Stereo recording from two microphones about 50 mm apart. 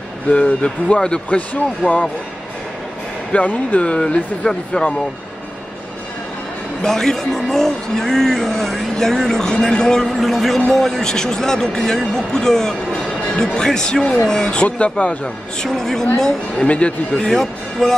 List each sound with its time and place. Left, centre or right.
0.3 s speech: left
1.8 s speech: right
3.3 s speech: left
4.1 s speech: centre
6.8 s speech: centre
10.1 s speech: centre
14.5 s speech: left
15.6 s speech: centre
16.6 s speech: left
17.3 s speech: centre